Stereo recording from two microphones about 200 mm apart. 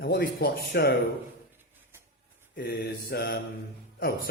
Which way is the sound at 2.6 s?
50° left (ahead or behind).